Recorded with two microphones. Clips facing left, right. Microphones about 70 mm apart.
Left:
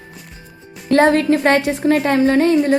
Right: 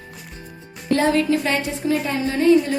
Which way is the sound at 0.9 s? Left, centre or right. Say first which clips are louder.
Left 6 dB; left.